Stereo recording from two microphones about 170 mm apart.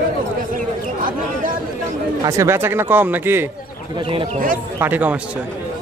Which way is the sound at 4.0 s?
30° right (ahead or behind).